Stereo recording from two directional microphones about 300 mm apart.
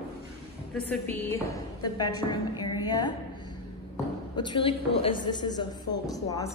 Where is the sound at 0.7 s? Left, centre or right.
Centre.